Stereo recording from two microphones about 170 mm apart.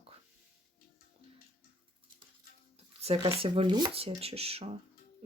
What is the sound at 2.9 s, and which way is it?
Speech, 35° right (ahead or behind).